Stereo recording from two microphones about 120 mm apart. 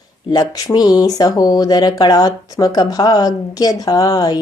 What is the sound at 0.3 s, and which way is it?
Speech, 35° left (ahead or behind).